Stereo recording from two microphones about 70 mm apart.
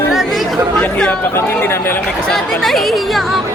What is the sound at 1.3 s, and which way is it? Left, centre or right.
Speech, left.